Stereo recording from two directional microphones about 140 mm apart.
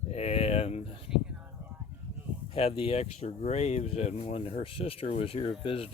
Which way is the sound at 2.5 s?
40° left (ahead or behind).